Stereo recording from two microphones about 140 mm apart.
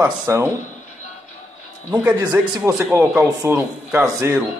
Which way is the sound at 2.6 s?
20° right (ahead or behind).